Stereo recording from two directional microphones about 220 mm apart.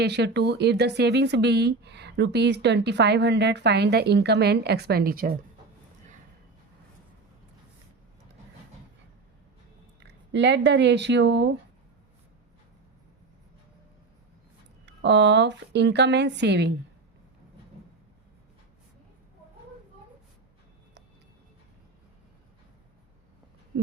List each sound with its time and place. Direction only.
0.0 s speech: 50° right (ahead or behind)
10.0 s speech: 50° right (ahead or behind)
14.8 s speech: 50° right (ahead or behind)